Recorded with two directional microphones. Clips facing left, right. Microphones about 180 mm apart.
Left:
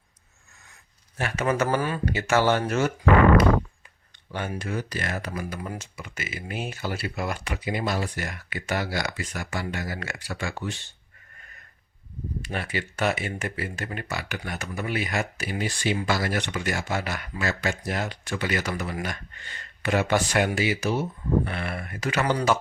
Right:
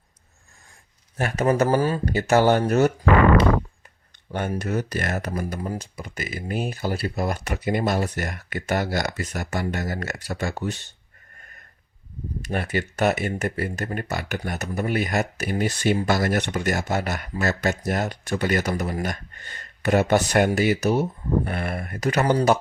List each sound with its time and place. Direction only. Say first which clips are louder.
1.2 s speech: right 4 dB; 40° right (ahead or behind)
4.3 s speech: right 5 dB; 45° right (ahead or behind)
12.5 s speech: right 6 dB; 45° right (ahead or behind)